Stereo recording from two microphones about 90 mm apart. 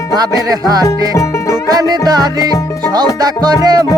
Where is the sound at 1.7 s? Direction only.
45° right (ahead or behind).